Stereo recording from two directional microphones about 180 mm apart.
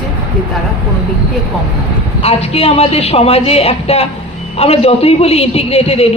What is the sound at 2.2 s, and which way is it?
A man's voice, 35° left (ahead or behind).